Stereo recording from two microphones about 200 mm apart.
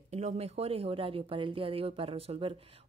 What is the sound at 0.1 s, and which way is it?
Speech, 30° right (ahead or behind).